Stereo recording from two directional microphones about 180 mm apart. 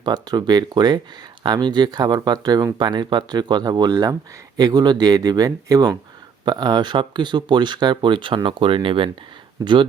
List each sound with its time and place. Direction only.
0.0 s speech: 25° right (ahead or behind)